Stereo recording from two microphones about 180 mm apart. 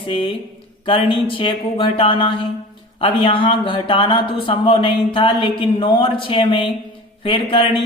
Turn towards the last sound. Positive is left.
turn(degrees=25)  # may be behind; listen again after turning